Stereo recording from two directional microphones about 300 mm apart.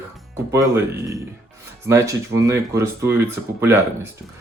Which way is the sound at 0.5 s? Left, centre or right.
Centre.